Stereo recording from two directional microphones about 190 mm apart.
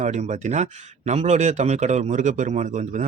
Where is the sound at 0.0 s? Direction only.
40° right (ahead or behind).